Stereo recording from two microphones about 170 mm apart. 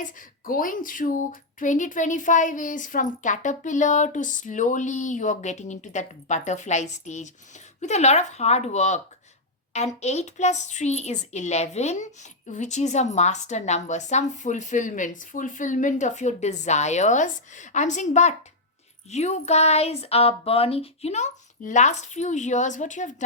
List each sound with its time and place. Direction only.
0.0 s a woman's voice: 55° left (ahead or behind)